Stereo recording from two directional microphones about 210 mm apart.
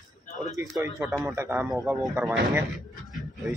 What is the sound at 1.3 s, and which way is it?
A man's voice, 10° right (ahead or behind).